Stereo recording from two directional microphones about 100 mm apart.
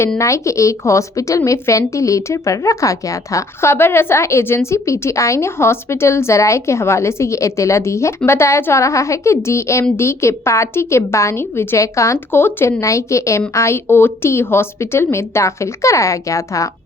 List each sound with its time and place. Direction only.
0.2 s a woman's voice: 30° left (ahead or behind)